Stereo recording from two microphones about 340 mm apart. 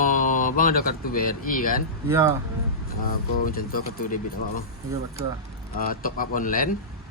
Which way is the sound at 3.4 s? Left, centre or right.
Left.